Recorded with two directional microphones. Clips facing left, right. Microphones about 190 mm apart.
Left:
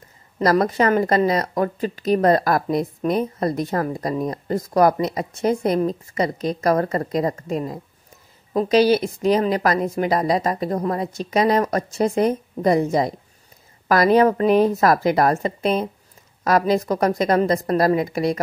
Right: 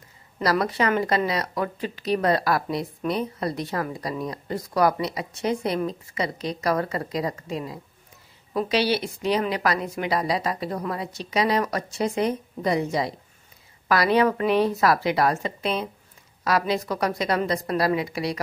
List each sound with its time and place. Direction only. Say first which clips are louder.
0.4 s speech: left 5 dB; 45° left (ahead or behind)